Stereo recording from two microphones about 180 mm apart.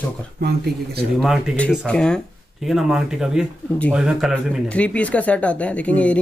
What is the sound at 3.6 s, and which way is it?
Speech, 10° left (ahead or behind).